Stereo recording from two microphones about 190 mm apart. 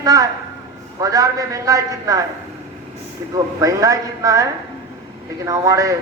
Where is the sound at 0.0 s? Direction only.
15° right (ahead or behind).